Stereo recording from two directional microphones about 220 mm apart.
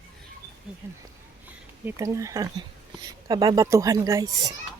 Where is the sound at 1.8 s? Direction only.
15° right (ahead or behind).